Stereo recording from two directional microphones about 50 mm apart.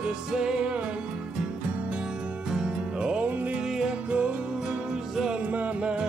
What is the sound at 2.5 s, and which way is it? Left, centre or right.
Music, centre.